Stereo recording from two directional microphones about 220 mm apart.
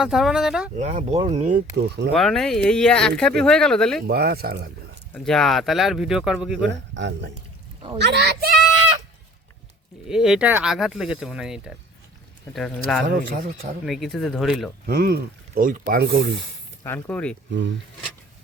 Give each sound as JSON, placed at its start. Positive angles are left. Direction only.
{"t": 0.0, "sound": "speech", "side_deg": 0}
{"t": 0.8, "sound": "speech", "side_deg": -35}
{"t": 2.1, "sound": "speech", "side_deg": 0}
{"t": 4.0, "sound": "speech", "side_deg": -45}
{"t": 5.1, "sound": "speech", "side_deg": 0}
{"t": 6.7, "sound": "speech", "side_deg": -55}
{"t": 10.1, "sound": "speech", "side_deg": -5}
{"t": 13.1, "sound": "speech", "side_deg": -40}
{"t": 13.8, "sound": "speech", "side_deg": 0}
{"t": 14.8, "sound": "speech", "side_deg": -45}
{"t": 16.8, "sound": "speech", "side_deg": 10}